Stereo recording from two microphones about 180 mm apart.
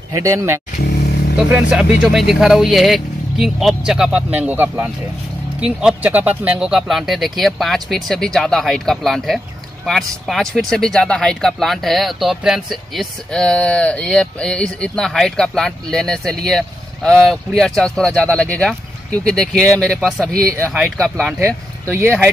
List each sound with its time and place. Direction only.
0.1 s speech: 15° right (ahead or behind)
1.5 s speech: 5° right (ahead or behind)
21.9 s speech: 15° right (ahead or behind)